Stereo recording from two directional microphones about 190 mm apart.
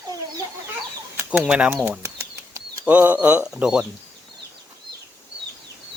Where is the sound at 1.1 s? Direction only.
5° right (ahead or behind).